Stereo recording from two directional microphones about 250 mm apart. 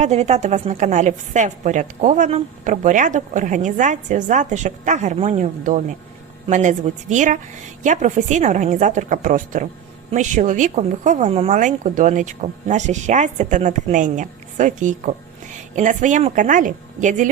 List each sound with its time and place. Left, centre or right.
0.0 s a woman's voice: right